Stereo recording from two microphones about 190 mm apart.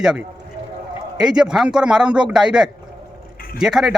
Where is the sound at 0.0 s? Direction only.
5° right (ahead or behind).